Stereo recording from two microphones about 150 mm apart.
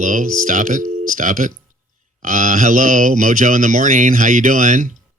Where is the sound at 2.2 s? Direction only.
60° right (ahead or behind).